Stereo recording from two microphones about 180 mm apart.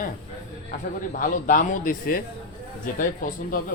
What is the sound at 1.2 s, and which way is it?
Speech, 50° left (ahead or behind).